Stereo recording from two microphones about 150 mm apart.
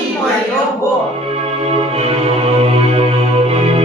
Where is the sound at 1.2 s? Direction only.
40° right (ahead or behind).